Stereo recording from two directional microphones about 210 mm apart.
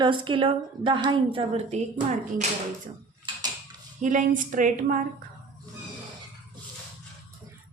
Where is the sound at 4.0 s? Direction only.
35° right (ahead or behind).